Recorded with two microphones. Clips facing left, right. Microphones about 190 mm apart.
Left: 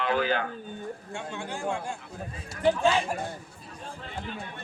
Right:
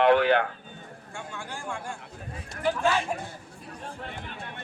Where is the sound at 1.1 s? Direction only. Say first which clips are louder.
Right 1 dB; 20° left (ahead or behind).